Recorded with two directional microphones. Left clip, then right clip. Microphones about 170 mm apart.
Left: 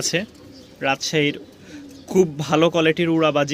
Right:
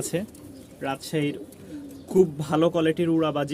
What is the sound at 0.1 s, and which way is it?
Speech, centre (ahead or behind).